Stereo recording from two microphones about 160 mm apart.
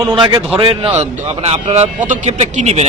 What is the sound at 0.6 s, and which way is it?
A man's voice, 35° right (ahead or behind).